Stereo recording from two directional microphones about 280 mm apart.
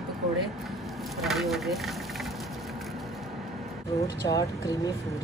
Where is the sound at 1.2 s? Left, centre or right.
Centre.